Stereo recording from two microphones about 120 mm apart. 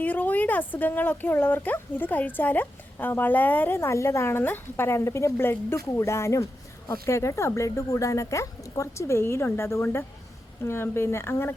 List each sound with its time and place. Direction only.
0.0 s speech: 15° left (ahead or behind)